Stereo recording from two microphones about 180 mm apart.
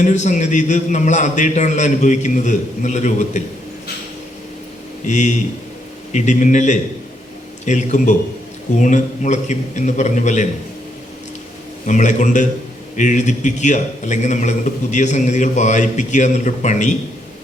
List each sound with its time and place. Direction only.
0.0 s a man's voice: 40° left (ahead or behind)
5.0 s a man's voice: 40° left (ahead or behind)
11.9 s a man's voice: 40° left (ahead or behind)